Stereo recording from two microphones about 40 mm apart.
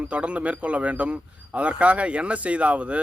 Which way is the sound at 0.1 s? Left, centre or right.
Right.